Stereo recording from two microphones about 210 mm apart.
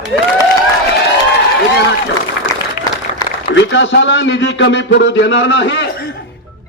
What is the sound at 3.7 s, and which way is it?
A man's voice, 60° left (ahead or behind).